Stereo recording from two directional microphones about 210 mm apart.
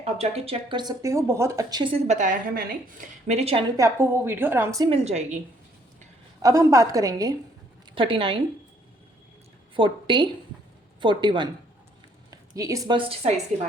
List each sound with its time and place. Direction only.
0.0 s speech: 30° right (ahead or behind)
3.8 s a woman's voice: 15° right (ahead or behind)
5.0 s a woman's voice: 30° right (ahead or behind)
6.4 s a woman's voice: 15° right (ahead or behind)
9.7 s a woman's voice: 25° right (ahead or behind)